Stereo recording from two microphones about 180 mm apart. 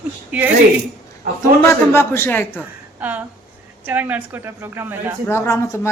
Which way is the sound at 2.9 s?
10° right (ahead or behind).